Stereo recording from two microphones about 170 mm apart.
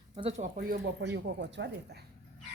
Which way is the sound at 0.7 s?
85° right.